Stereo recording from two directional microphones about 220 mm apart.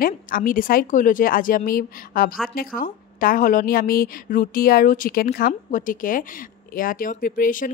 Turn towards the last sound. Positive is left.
turn(degrees=40)  # may be behind; listen again after turning